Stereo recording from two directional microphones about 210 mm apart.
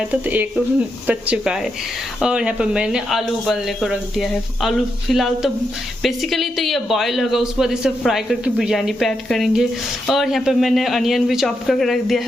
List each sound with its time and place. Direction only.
0.1 s speech: 5° right (ahead or behind)